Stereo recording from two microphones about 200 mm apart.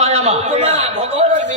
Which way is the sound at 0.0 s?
30° right (ahead or behind).